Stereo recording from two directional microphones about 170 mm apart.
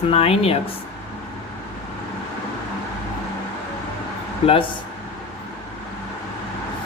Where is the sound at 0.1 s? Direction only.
35° left (ahead or behind).